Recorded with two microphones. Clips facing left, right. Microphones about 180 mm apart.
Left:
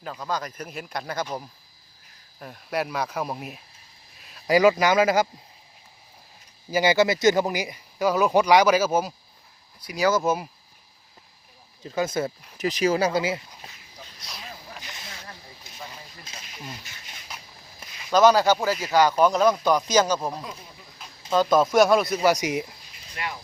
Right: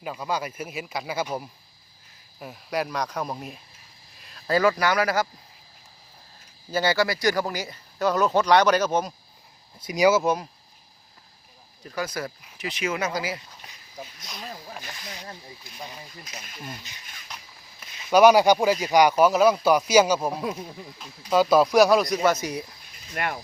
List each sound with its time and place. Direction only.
0.0 s speech: 10° right (ahead or behind)
4.2 s a sound: centre (ahead or behind)
4.4 s speech: 15° left (ahead or behind)
6.7 s speech: 15° left (ahead or behind)
9.8 s speech: 20° right (ahead or behind)
10.1 s speech: centre (ahead or behind)
11.8 s speech: 25° left (ahead or behind)
12.5 s speech: 40° left (ahead or behind)
16.9 s speech: 20° right (ahead or behind)
18.1 s speech: 10° right (ahead or behind); by 22.6 s 15° left (ahead or behind)
23.1 s speech: 55° right (ahead or behind)